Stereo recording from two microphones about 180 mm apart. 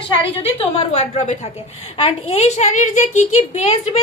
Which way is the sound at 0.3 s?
30° left (ahead or behind).